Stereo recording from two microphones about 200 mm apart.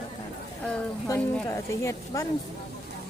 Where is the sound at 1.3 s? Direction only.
15° left (ahead or behind).